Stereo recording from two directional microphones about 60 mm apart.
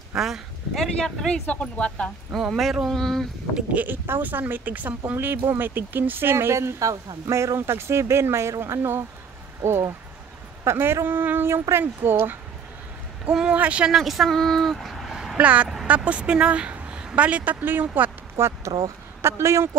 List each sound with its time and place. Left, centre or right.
0.1 s speech: centre
0.7 s speech: centre
1.5 s speech: centre
2.4 s speech: centre
2.9 s speech: centre
3.7 s speech: right
5.1 s speech: right
13.3 s speech: centre
13.9 s speech: centre
15.3 s a woman's voice: right
18.4 s speech: right